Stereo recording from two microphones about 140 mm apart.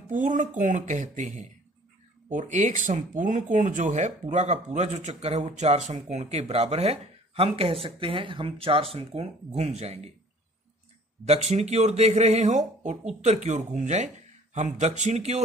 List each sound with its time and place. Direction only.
0.1 s speech: 65° right (ahead or behind)
11.2 s speech: 50° right (ahead or behind)